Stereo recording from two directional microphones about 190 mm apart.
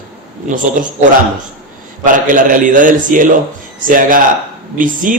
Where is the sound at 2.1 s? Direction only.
45° right (ahead or behind).